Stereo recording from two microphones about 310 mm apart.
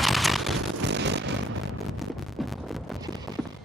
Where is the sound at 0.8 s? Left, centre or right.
Right.